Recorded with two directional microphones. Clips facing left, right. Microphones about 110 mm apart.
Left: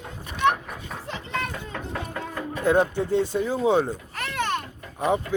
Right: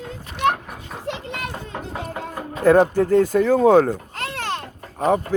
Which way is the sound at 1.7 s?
25° right (ahead or behind).